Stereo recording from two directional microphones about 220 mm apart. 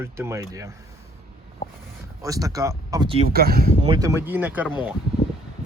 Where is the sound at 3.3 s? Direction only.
45° right (ahead or behind).